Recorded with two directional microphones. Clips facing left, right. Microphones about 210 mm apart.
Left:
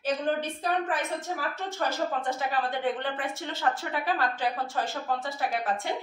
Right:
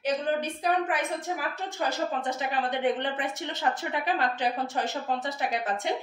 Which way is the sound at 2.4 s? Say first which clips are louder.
Right 1 dB; 20° right (ahead or behind).